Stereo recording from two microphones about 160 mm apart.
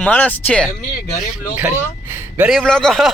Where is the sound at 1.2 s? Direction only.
5° right (ahead or behind).